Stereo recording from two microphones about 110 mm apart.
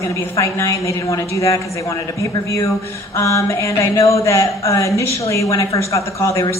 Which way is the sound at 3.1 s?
30° left (ahead or behind).